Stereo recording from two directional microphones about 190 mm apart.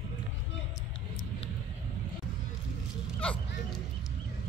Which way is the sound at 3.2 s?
5° left (ahead or behind).